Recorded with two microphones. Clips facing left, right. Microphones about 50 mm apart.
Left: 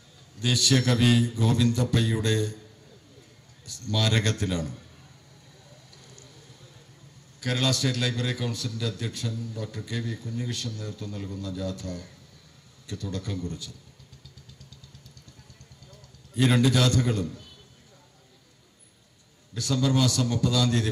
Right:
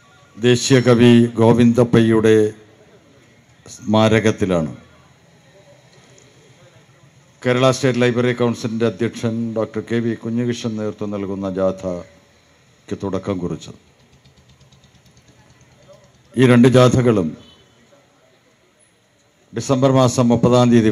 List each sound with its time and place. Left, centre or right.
0.3 s a man's voice: right
3.6 s a man's voice: right
6.0 s a sound: right
7.3 s a man's voice: right
15.9 s a man's voice: right
19.5 s a man's voice: right